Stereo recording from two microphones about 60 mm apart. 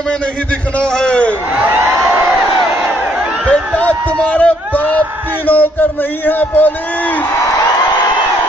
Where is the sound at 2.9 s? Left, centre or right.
Centre.